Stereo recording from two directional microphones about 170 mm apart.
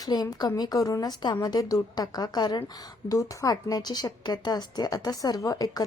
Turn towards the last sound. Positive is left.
turn(degrees=20)  # may be behind; listen again after turning